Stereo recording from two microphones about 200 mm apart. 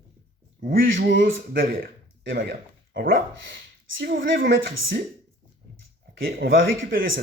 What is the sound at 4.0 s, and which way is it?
Speech, 70° right (ahead or behind).